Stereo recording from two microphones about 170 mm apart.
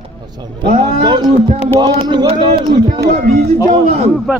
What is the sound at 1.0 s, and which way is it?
Speech, 25° right (ahead or behind).